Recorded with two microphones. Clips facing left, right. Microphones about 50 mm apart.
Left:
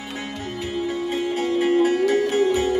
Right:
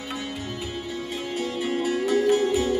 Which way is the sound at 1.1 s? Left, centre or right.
Left.